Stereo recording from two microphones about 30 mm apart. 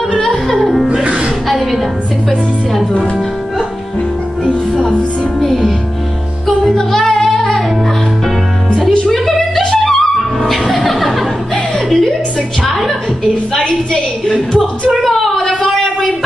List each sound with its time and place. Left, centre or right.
1.0 s music: right
1.5 s music: centre
5.4 s music: centre
9.8 s music: centre
13.6 s a sound: centre
14.6 s a sound: centre